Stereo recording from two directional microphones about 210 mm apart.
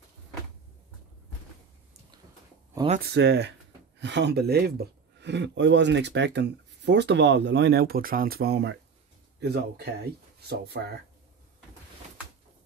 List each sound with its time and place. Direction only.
3.1 s speech: 55° right (ahead or behind)